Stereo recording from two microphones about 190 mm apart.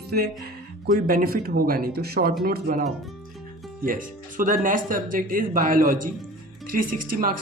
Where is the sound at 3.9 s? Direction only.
45° right (ahead or behind).